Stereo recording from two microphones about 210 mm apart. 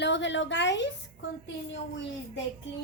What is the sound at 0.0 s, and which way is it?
Speech, 60° left (ahead or behind).